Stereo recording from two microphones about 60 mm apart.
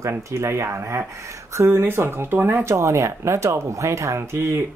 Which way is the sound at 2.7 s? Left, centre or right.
Right.